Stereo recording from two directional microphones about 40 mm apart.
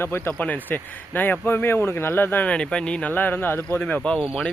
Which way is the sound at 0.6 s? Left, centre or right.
Left.